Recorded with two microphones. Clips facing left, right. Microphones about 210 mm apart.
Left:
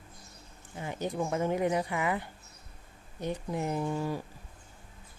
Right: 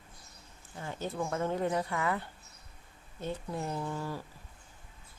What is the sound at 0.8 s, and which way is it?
A woman's voice, 15° left (ahead or behind).